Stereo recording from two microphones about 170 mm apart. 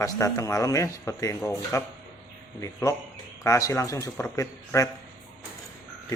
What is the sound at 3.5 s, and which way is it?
Speech, 20° left (ahead or behind).